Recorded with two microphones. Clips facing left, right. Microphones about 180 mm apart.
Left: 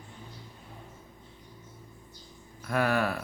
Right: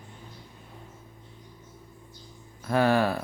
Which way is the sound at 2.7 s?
30° right (ahead or behind).